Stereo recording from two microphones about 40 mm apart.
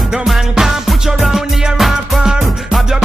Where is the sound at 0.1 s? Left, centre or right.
Centre.